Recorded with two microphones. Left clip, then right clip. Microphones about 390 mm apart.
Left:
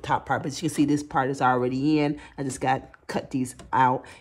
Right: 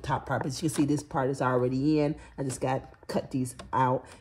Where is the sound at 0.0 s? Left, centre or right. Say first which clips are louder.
Left 5 dB; centre.